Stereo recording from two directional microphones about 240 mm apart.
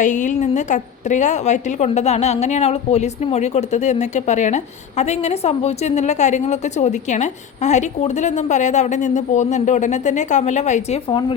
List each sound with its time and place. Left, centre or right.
0.0 s a woman's voice: left